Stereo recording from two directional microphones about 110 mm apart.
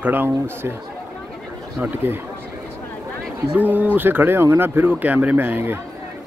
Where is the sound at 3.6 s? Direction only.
15° right (ahead or behind).